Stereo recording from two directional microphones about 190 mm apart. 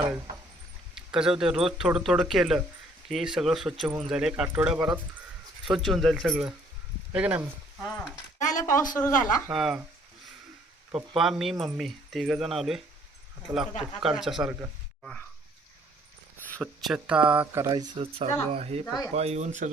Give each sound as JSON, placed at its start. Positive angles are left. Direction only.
{"t": 0.9, "sound": "speech", "side_deg": -5}
{"t": 8.4, "sound": "speech", "side_deg": 40}
{"t": 9.5, "sound": "speech", "side_deg": -5}
{"t": 11.2, "sound": "speech", "side_deg": 0}
{"t": 16.5, "sound": "speech", "side_deg": 0}